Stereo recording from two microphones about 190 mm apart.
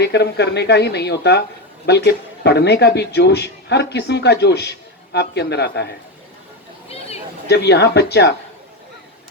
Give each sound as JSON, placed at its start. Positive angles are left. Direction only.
{"t": 0.0, "sound": "speech", "side_deg": 60}
{"t": 6.8, "sound": "a sound", "side_deg": 30}
{"t": 7.4, "sound": "speech", "side_deg": 60}